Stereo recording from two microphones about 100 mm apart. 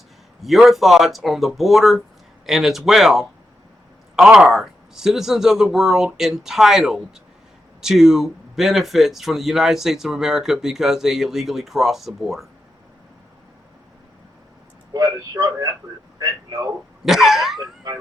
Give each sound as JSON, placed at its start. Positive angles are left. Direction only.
{"t": 0.4, "sound": "speech", "side_deg": 0}
{"t": 14.9, "sound": "a man's voice", "side_deg": -35}
{"t": 16.1, "sound": "a sound", "side_deg": -40}
{"t": 17.1, "sound": "speech", "side_deg": 0}